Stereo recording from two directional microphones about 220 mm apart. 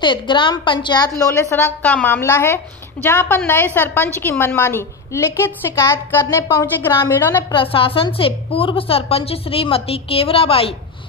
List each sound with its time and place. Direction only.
0.0 s a woman's voice: 20° left (ahead or behind)
7.5 s a woman's voice: 25° left (ahead or behind)